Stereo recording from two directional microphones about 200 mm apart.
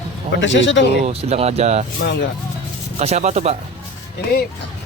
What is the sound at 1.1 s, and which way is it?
Speech, 30° right (ahead or behind).